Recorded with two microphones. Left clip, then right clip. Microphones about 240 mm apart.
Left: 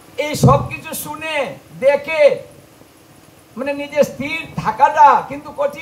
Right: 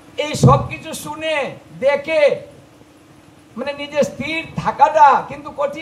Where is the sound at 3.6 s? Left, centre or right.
Right.